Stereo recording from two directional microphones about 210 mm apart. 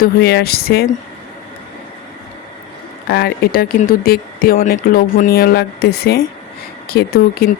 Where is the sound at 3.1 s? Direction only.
50° left (ahead or behind).